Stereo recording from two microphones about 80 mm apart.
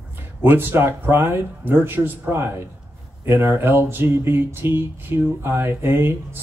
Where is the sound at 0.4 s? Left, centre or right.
Right.